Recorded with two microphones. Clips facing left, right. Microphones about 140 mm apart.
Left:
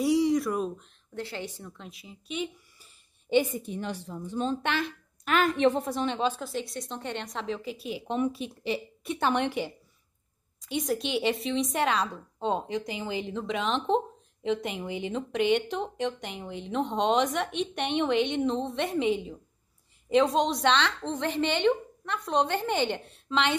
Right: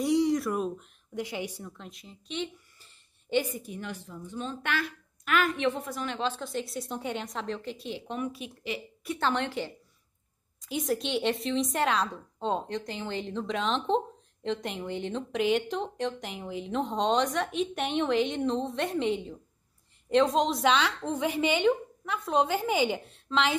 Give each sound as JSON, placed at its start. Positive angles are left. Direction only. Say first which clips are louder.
{"t": 0.0, "sound": "speech", "louder": "left 1 dB", "side_deg": 0}
{"t": 1.1, "sound": "a woman's voice", "louder": "right 2 dB", "side_deg": -15}
{"t": 6.4, "sound": "a woman's voice", "louder": "even", "side_deg": 0}
{"t": 8.1, "sound": "a woman's voice", "louder": "left 8 dB", "side_deg": 25}
{"t": 10.6, "sound": "a woman's voice", "louder": "left 1 dB", "side_deg": 0}